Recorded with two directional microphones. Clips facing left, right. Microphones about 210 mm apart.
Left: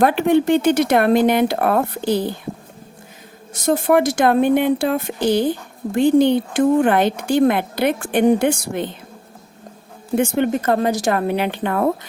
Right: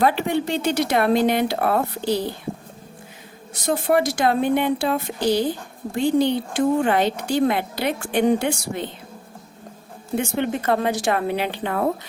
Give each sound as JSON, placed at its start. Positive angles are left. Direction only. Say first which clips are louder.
{"t": 0.0, "sound": "speech", "louder": "left 5 dB", "side_deg": 55}
{"t": 3.7, "sound": "speech", "louder": "left 4 dB", "side_deg": 50}
{"t": 10.2, "sound": "speech", "louder": "left 5 dB", "side_deg": 50}